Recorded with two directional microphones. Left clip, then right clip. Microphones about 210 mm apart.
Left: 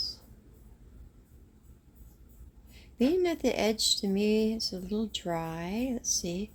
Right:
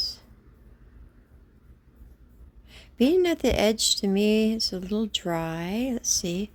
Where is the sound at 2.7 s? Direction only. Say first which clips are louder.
Right 6 dB; 35° right (ahead or behind).